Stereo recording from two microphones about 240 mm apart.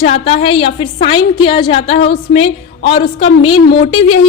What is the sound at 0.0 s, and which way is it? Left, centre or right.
A woman's voice, left.